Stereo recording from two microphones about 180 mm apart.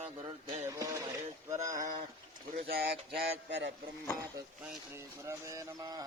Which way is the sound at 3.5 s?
75° right (ahead or behind).